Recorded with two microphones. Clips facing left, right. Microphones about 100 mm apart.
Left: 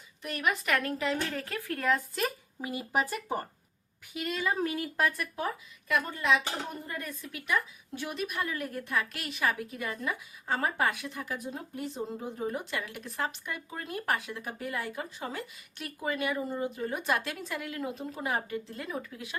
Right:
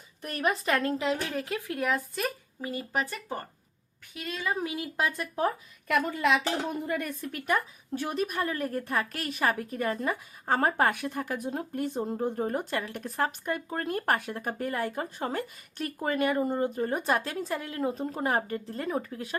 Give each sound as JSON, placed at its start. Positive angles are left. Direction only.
{"t": 0.2, "sound": "a woman's voice", "side_deg": -40}
{"t": 1.9, "sound": "a woman's voice", "side_deg": 0}
{"t": 2.6, "sound": "a woman's voice", "side_deg": 10}
{"t": 4.6, "sound": "speech", "side_deg": -15}
{"t": 5.9, "sound": "a woman's voice", "side_deg": -65}